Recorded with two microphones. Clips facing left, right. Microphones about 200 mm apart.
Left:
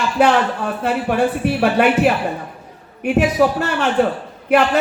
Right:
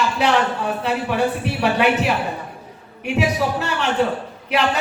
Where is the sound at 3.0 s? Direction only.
50° left (ahead or behind).